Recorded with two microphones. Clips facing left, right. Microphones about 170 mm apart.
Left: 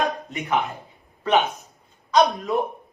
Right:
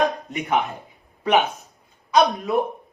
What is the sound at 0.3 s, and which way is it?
Speech, 15° right (ahead or behind).